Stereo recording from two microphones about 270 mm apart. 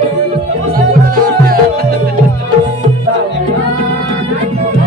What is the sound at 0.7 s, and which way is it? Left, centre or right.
Music, right.